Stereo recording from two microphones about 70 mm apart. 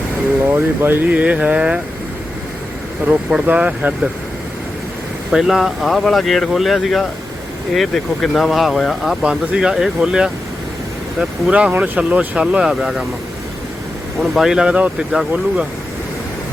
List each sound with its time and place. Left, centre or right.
0.4 s mantra: right
1.1 s mantra: centre
3.1 s speech: centre
3.4 s mantra: centre
5.3 s speech: centre
14.2 s speech: centre